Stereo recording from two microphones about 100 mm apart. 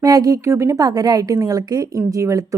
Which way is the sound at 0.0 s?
35° right (ahead or behind).